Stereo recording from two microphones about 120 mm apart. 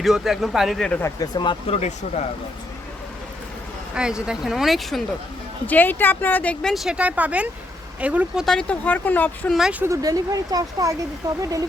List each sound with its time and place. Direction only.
0.0 s speech: centre (ahead or behind)
1.2 s speech: 35° left (ahead or behind)
1.6 s speech: 65° left (ahead or behind)
3.9 s speech: 5° right (ahead or behind)
5.6 s a woman's voice: 15° left (ahead or behind); by 8.4 s 10° right (ahead or behind)
8.4 s a woman's voice: 10° left (ahead or behind)
9.5 s speech: 5° right (ahead or behind)
9.8 s speech: 25° right (ahead or behind)